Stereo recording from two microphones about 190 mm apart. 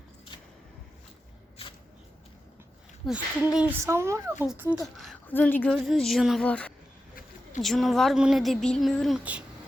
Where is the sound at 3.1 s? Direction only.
5° right (ahead or behind).